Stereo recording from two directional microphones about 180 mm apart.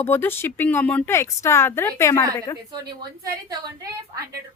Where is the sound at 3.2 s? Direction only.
20° right (ahead or behind).